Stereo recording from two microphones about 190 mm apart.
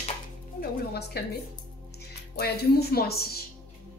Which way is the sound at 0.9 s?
55° left (ahead or behind).